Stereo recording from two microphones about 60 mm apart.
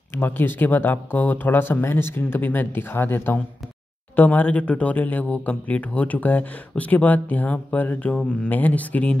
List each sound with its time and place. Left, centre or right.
0.1 s speech: left
8.1 s speech: centre